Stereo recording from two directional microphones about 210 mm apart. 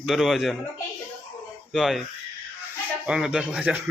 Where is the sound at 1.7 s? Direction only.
Centre (ahead or behind).